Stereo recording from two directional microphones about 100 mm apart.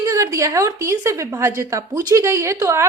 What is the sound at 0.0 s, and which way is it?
Speech, 35° right (ahead or behind).